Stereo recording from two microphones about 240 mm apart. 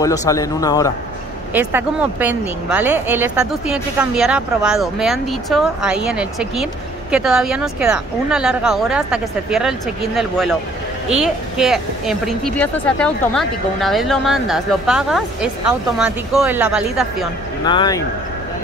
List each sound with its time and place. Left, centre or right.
0.0 s speech: centre
1.5 s a woman's voice: centre
17.6 s speech: centre